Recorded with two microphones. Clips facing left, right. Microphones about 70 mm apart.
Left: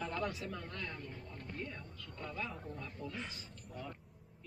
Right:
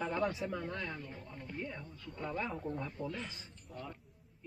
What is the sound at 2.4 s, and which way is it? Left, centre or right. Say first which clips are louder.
Speech: right 6 dB; right.